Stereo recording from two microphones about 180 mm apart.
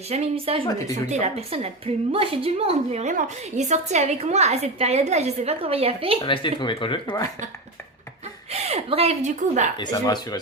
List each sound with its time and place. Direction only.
0.1 s a woman's voice: 35° right (ahead or behind)
0.6 s speech: 20° left (ahead or behind)
1.1 s a woman's voice: 35° right (ahead or behind)
6.2 s speech: 25° left (ahead or behind)
8.6 s a woman's voice: 35° right (ahead or behind)
9.7 s speech: 25° left (ahead or behind)